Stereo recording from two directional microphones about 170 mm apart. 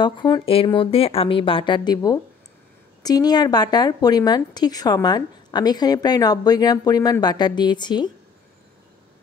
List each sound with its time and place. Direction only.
0.0 s a woman's voice: 25° left (ahead or behind)